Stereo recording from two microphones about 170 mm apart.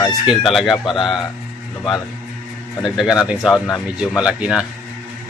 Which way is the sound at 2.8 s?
5° right (ahead or behind).